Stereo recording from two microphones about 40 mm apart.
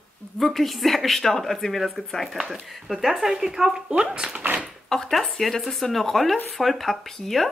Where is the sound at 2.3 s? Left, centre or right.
Centre.